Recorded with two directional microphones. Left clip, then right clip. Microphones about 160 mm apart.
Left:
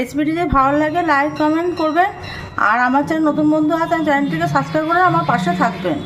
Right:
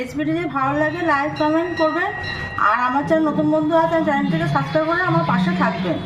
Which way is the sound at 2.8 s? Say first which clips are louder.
Left 2 dB; 65° left (ahead or behind).